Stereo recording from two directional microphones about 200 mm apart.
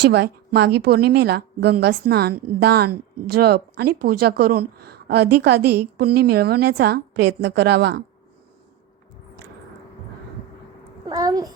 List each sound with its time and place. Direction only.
0.0 s speech: 55° right (ahead or behind)
11.0 s a child's voice: 20° right (ahead or behind)